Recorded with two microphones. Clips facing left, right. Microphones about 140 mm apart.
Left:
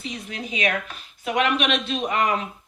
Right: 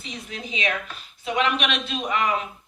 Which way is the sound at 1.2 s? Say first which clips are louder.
Left 2 dB; 50° left (ahead or behind).